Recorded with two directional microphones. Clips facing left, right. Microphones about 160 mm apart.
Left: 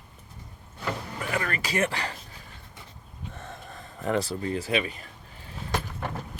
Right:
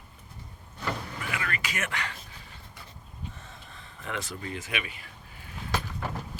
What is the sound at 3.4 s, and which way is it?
Speech, 55° left (ahead or behind).